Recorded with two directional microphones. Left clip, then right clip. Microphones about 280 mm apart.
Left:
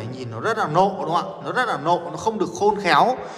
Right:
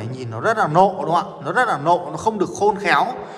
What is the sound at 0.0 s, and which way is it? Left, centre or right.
A man's voice, centre.